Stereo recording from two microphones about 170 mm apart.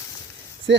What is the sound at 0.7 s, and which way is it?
Speech, 90° right.